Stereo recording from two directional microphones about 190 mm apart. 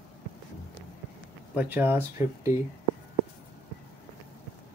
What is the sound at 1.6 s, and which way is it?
Speech, 10° right (ahead or behind).